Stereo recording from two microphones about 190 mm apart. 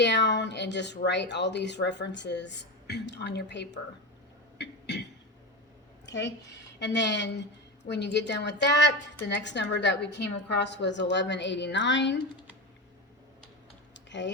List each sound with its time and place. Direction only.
0.0 s a sound: 65° left (ahead or behind)
1.0 s speech: 65° left (ahead or behind)
4.5 s cough: 65° left (ahead or behind)
6.1 s a woman's voice: 65° left (ahead or behind)
13.9 s typing: 70° left (ahead or behind)